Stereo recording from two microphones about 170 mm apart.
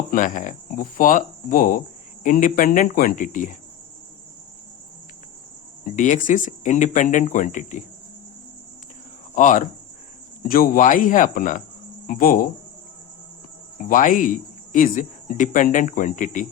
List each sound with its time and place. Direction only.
0.1 s speech: 50° left (ahead or behind)
5.8 s speech: 50° left (ahead or behind)
9.3 s speech: 50° left (ahead or behind)
13.8 s speech: 50° left (ahead or behind)